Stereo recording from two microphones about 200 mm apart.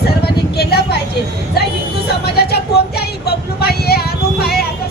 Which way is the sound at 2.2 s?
55° left (ahead or behind).